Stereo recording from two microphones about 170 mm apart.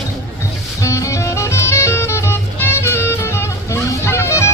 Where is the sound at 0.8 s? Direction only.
20° left (ahead or behind).